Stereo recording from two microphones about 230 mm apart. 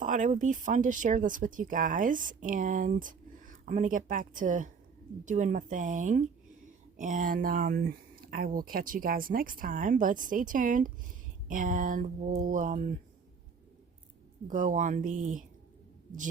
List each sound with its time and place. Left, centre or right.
0.0 s speech: right
14.4 s speech: right